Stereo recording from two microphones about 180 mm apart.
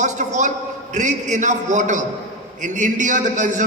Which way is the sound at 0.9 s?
45° right (ahead or behind).